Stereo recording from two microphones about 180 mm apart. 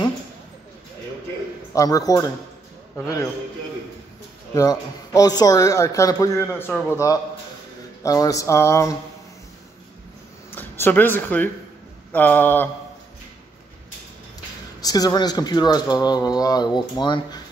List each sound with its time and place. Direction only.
1.7 s speech: 20° left (ahead or behind)
4.6 s speech: 20° left (ahead or behind)
8.0 s speech: 20° left (ahead or behind)
10.5 s speech: 10° left (ahead or behind)
14.8 s speech: 20° left (ahead or behind)